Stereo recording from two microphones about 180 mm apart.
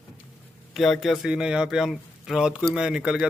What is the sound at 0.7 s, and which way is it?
A man's voice, centre (ahead or behind).